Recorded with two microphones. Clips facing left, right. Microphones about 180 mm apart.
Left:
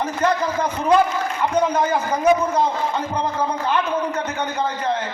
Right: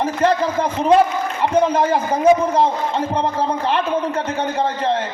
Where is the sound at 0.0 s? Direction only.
30° right (ahead or behind).